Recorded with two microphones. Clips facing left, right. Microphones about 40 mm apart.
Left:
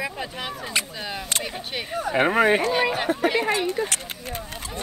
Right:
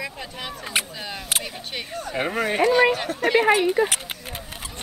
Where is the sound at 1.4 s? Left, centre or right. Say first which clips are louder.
Left 2 dB; centre.